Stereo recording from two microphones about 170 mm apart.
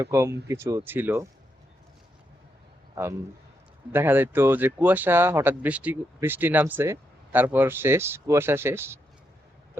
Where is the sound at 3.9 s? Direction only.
10° right (ahead or behind).